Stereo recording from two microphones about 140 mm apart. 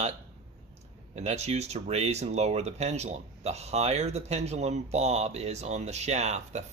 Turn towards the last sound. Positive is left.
turn(degrees=-55)  # may be behind; listen again after turning